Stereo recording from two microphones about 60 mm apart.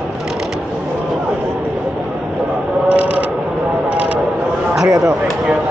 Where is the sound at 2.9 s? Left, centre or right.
Right.